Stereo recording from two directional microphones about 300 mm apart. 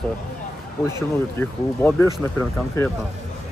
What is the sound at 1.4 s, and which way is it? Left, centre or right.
Speech, centre.